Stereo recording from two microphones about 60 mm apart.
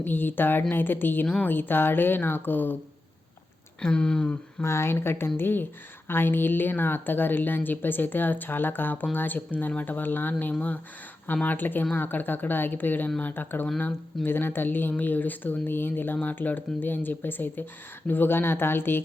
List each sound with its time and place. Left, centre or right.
0.0 s a woman's voice: left
3.8 s speech: centre
4.6 s a woman's voice: left